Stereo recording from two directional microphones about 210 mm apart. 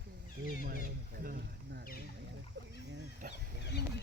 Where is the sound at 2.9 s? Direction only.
40° right (ahead or behind).